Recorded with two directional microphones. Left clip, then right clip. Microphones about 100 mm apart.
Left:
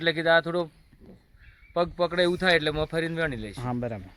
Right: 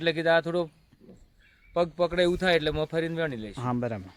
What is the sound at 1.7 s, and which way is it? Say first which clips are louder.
Speech: even; 30° right (ahead or behind).